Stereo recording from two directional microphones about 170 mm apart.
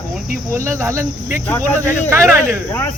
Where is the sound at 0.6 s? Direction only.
15° right (ahead or behind).